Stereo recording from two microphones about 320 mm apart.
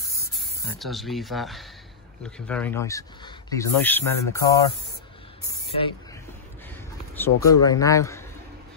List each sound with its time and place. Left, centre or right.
0.1 s speech: centre
5.4 s a sound: centre
7.2 s speech: centre